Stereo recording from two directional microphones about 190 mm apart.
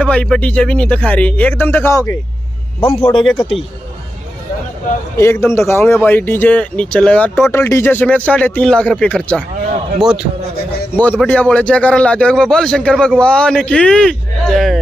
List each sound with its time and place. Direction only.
0.0 s speech: 5° left (ahead or behind)
2.8 s a man's voice: 25° left (ahead or behind)
5.1 s a man's voice: 15° left (ahead or behind); by 10.2 s 5° right (ahead or behind)
11.0 s a man's voice: 10° left (ahead or behind)